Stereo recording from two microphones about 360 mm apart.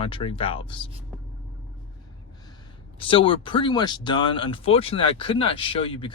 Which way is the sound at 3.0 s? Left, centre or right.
Centre.